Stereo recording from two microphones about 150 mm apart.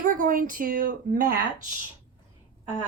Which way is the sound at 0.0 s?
55° right (ahead or behind).